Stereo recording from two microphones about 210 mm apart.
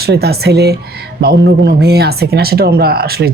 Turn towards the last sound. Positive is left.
turn(degrees=-45)  # may be behind; listen again after turning